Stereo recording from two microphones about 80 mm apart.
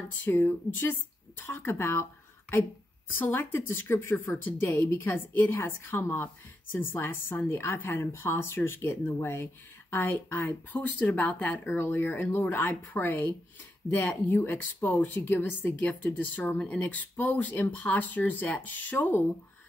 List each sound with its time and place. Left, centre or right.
0.2 s a woman's voice: left
3.1 s a woman's voice: left